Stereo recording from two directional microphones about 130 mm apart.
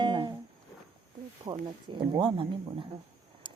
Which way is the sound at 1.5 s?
35° right (ahead or behind).